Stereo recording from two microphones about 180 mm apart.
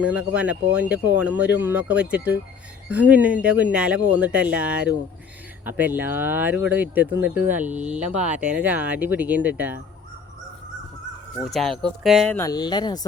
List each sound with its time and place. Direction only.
0.0 s speech: 5° right (ahead or behind)
11.5 s speech: centre (ahead or behind)
12.4 s speech: 20° left (ahead or behind)